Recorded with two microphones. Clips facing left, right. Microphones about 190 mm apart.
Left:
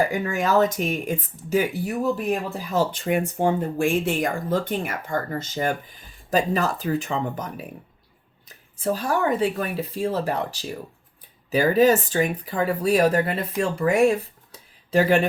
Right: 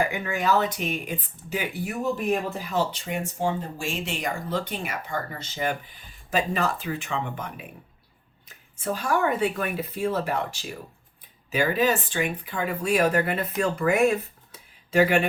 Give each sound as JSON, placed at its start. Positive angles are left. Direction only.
{"t": 0.1, "sound": "speech", "side_deg": 40}
{"t": 2.6, "sound": "speech", "side_deg": 45}